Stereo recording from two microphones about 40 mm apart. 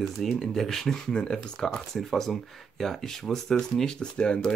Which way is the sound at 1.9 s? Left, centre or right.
Centre.